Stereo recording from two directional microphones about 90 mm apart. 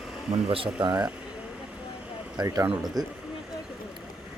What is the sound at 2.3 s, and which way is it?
Speech, 40° right (ahead or behind).